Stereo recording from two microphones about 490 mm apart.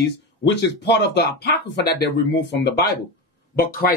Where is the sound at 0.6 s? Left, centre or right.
Centre.